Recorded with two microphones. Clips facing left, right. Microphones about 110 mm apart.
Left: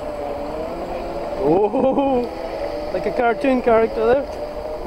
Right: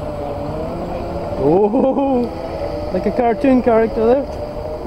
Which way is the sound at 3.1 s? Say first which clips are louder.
Right 4 dB; 60° left (ahead or behind).